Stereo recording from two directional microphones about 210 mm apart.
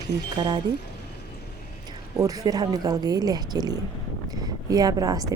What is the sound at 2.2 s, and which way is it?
A woman's voice, 15° right (ahead or behind).